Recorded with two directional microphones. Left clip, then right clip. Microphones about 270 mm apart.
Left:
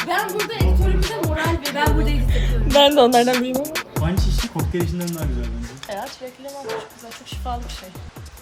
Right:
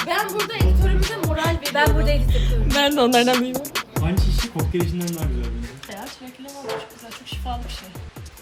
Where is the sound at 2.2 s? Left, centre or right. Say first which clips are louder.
Left 1 dB; centre.